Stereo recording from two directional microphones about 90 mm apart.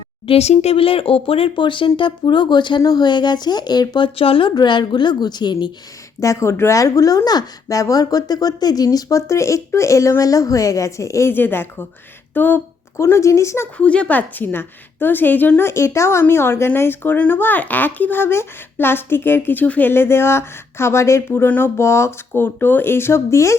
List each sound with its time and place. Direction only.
0.3 s speech: 90° left; by 4.0 s 50° left (ahead or behind)
4.0 s speech: 85° left
4.5 s a woman's voice: 60° left (ahead or behind)
6.1 s a woman's voice: 35° left (ahead or behind)
13.0 s speech: 35° left (ahead or behind)
13.7 s a woman's voice: 15° left (ahead or behind); by 23.6 s 30° left (ahead or behind)